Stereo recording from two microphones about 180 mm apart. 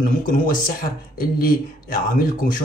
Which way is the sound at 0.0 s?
50° left (ahead or behind).